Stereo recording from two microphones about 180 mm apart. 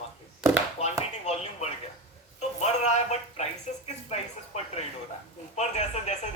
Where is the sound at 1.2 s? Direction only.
40° left (ahead or behind).